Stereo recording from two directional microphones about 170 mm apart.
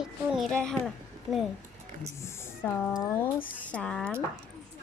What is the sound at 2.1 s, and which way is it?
Speech, 15° left (ahead or behind).